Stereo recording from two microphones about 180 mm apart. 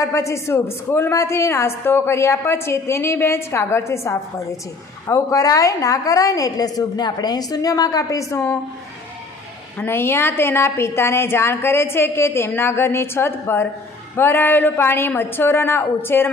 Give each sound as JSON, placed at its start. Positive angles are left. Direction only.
{"t": 0.0, "sound": "a woman's voice", "side_deg": 15}
{"t": 9.8, "sound": "a woman's voice", "side_deg": 10}